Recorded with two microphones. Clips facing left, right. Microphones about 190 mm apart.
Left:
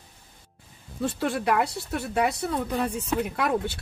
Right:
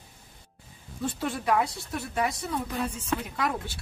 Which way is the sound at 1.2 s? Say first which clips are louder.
Left 2 dB; 70° left (ahead or behind).